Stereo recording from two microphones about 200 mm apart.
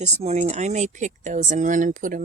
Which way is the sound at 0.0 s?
30° right (ahead or behind).